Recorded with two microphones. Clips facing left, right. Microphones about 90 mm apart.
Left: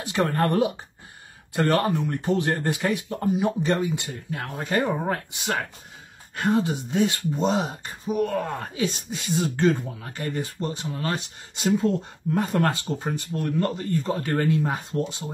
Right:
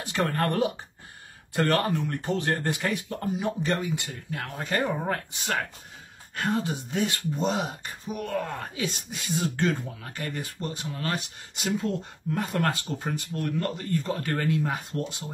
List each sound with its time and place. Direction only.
0.0 s speech: 20° left (ahead or behind)